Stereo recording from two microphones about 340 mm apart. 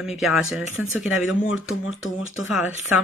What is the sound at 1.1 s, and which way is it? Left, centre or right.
Speech, left.